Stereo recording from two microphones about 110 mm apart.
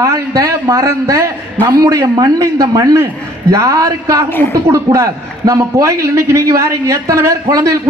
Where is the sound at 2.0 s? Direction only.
45° right (ahead or behind).